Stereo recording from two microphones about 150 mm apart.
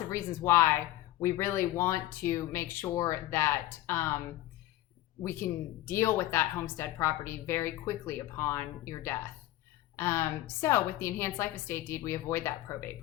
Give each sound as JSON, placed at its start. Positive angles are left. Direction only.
{"t": 0.1, "sound": "speech", "side_deg": 20}
{"t": 5.2, "sound": "speech", "side_deg": 15}